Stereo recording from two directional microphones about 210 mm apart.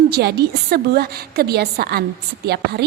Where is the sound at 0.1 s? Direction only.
50° right (ahead or behind).